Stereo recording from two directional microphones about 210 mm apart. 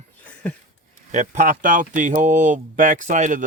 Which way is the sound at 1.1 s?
35° right (ahead or behind).